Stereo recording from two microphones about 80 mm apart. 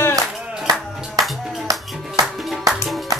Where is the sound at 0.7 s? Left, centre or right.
Right.